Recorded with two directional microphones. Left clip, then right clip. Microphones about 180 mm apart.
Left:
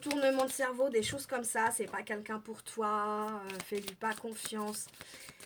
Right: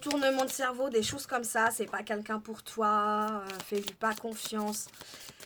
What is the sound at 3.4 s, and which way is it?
Speech, 20° right (ahead or behind).